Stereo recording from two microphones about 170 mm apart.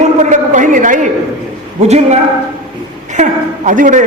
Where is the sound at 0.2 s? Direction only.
45° right (ahead or behind).